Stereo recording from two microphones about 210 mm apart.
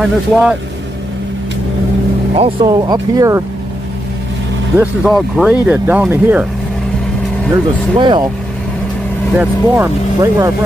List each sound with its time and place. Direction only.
0.0 s speech: 5° right (ahead or behind)
2.3 s speech: 25° right (ahead or behind)
4.7 s speech: centre (ahead or behind)
8.0 s speech: 20° right (ahead or behind)
9.4 s speech: 15° right (ahead or behind)